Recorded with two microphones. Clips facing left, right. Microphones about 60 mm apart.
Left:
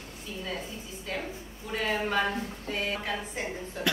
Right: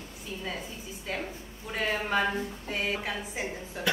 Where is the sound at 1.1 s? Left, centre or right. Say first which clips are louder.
Even; centre.